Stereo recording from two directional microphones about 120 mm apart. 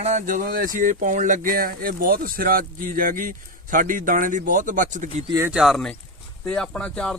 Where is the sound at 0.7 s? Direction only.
90° right.